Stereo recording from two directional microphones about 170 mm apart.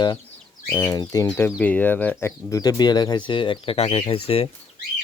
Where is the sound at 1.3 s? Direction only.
5° left (ahead or behind).